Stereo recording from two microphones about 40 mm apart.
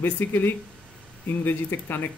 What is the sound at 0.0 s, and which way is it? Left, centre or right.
Speech, left.